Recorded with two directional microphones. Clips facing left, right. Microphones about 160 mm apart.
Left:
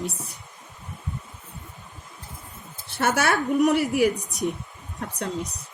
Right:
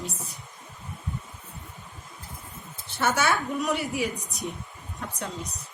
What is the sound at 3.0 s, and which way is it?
Speech, 60° left (ahead or behind).